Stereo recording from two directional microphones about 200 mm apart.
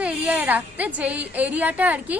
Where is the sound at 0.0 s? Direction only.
5° right (ahead or behind).